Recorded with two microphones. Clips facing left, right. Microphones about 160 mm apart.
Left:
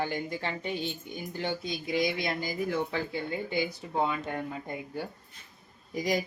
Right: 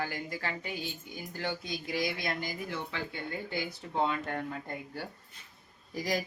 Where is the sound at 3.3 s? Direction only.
15° left (ahead or behind).